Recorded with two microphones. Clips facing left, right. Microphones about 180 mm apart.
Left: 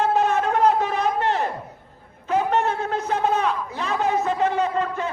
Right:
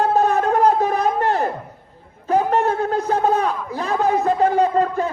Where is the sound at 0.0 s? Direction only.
35° right (ahead or behind).